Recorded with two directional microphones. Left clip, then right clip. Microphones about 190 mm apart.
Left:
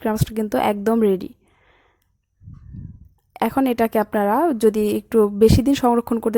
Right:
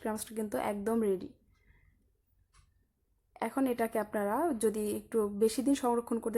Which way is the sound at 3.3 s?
40° left (ahead or behind).